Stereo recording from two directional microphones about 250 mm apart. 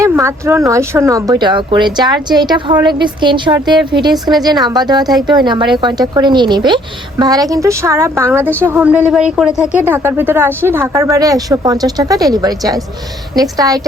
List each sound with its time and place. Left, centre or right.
0.0 s speech: centre
4.1 s speech: centre
4.6 s speech: centre